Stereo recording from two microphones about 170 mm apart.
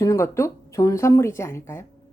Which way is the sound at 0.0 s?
15° left (ahead or behind).